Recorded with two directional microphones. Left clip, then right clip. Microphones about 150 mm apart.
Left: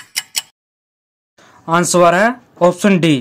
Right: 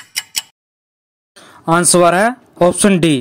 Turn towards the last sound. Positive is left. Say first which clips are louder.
# even
turn(degrees=-40)  # may be behind; listen again after turning